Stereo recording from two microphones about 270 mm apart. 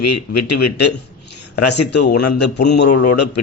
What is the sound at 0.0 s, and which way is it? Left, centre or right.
Speech, left.